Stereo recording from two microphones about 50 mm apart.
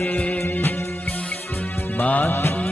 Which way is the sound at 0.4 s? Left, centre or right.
Left.